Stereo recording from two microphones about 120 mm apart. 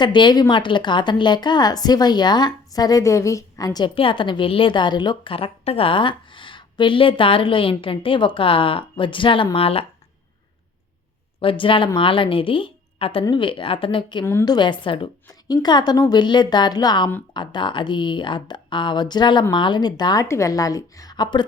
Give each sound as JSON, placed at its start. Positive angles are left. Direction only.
{"t": 0.0, "sound": "a woman's voice", "side_deg": 40}
{"t": 11.3, "sound": "a woman's voice", "side_deg": 45}
{"t": 15.3, "sound": "a woman's voice", "side_deg": 35}
{"t": 20.2, "sound": "a woman's voice", "side_deg": 25}